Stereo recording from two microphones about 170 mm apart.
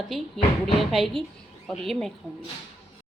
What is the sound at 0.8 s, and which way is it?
A woman's voice, centre (ahead or behind).